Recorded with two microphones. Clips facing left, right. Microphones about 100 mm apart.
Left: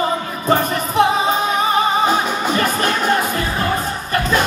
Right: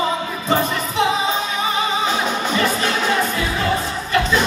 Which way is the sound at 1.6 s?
50° left (ahead or behind).